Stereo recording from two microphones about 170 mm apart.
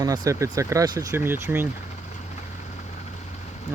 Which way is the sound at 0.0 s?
20° right (ahead or behind).